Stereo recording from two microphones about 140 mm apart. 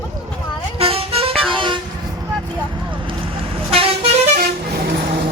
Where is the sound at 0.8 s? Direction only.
45° right (ahead or behind).